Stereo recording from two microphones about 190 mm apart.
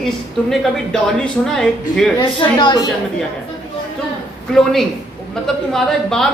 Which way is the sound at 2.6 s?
25° left (ahead or behind).